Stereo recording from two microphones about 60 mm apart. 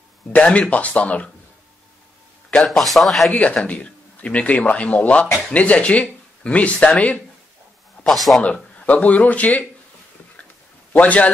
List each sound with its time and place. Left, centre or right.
0.3 s speech: left
2.5 s a man's voice: centre
3.3 s speech: left
8.0 s speech: centre
8.8 s speech: left
10.9 s a man's voice: left